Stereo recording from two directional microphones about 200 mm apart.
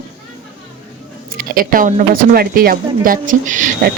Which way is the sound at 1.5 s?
45° right (ahead or behind).